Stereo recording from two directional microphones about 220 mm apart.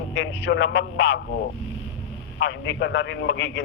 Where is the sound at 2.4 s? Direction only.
55° left (ahead or behind).